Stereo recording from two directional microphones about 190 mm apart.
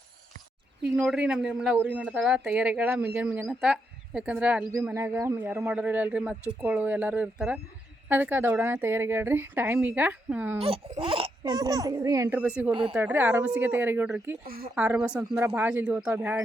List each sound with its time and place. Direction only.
0.9 s speech: 5° right (ahead or behind)
10.9 s speech: 30° right (ahead or behind); by 14.3 s 10° right (ahead or behind)
14.4 s a woman's voice: 50° right (ahead or behind)
14.8 s speech: 5° right (ahead or behind)